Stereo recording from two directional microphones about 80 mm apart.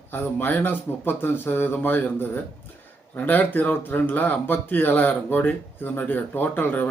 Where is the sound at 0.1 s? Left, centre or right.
Left.